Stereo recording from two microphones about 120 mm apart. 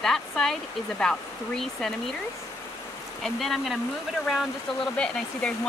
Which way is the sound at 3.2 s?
Centre (ahead or behind).